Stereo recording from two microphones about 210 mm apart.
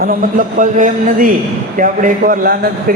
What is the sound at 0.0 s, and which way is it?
A man's voice, 40° right (ahead or behind).